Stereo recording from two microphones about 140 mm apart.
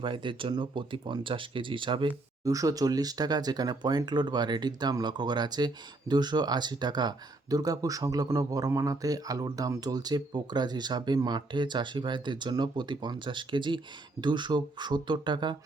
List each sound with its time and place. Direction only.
0.0 s a man's voice: 35° right (ahead or behind)
2.4 s a man's voice: 25° right (ahead or behind)